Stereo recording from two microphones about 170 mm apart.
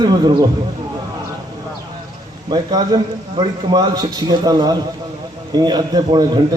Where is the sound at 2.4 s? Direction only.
25° right (ahead or behind).